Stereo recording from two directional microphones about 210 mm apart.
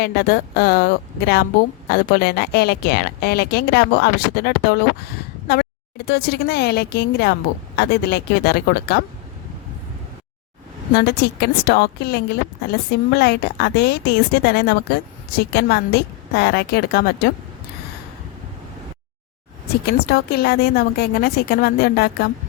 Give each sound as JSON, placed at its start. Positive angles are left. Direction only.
{"t": 0.0, "sound": "a woman's voice", "side_deg": 50}
{"t": 6.1, "sound": "a woman's voice", "side_deg": 50}
{"t": 10.9, "sound": "a woman's voice", "side_deg": 50}
{"t": 19.8, "sound": "a woman's voice", "side_deg": 50}